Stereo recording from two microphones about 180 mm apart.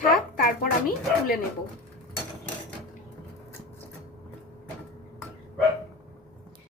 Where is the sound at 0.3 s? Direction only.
55° left (ahead or behind).